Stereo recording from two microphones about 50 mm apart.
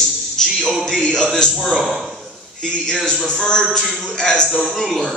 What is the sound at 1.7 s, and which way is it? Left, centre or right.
Speech, centre.